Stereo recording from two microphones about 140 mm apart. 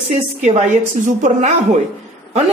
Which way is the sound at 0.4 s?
55° right (ahead or behind).